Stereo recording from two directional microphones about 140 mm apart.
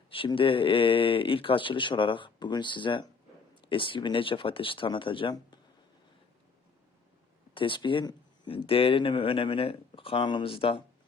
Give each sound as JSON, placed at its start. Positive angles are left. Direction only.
{"t": 0.1, "sound": "speech", "side_deg": 40}
{"t": 7.5, "sound": "speech", "side_deg": 35}